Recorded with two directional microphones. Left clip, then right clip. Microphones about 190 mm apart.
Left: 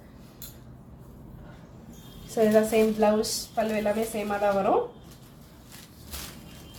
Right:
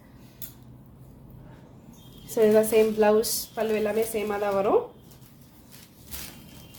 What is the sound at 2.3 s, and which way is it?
A woman's voice, 50° right (ahead or behind).